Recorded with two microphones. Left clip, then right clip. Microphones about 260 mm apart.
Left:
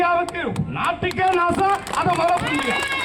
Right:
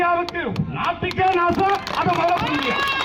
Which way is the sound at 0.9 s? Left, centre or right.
Left.